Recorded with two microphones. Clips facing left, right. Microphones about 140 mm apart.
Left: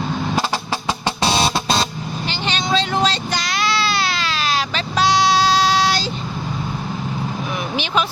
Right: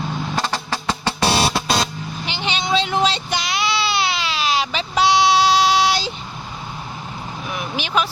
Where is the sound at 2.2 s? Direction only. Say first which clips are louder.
Even; 15° right (ahead or behind).